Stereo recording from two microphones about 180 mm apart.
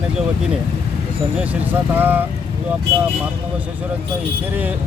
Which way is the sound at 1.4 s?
10° right (ahead or behind).